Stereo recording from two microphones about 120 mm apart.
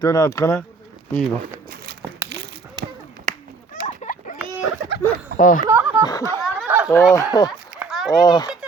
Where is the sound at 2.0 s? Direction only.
20° right (ahead or behind).